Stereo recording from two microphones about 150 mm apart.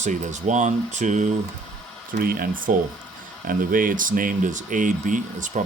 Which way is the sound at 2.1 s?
75° right (ahead or behind).